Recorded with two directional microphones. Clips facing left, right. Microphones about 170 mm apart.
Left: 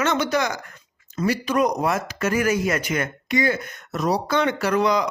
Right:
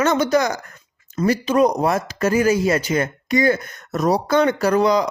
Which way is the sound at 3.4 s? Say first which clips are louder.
Right 5 dB; 45° right (ahead or behind).